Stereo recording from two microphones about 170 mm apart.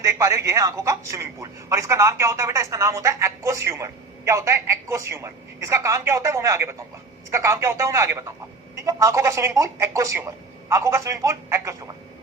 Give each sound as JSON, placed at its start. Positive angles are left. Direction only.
{"t": 0.0, "sound": "speech", "side_deg": -20}